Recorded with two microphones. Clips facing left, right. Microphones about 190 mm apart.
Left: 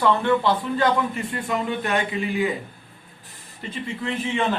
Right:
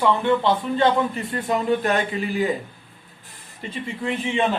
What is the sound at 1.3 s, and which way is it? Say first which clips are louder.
Speech: right 4 dB; 40° right (ahead or behind).